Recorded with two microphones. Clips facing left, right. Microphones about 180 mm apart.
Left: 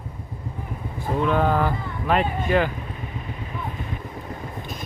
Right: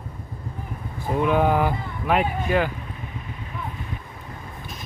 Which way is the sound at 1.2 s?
15° right (ahead or behind).